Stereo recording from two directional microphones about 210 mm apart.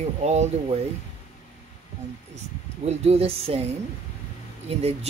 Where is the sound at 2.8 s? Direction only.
30° right (ahead or behind).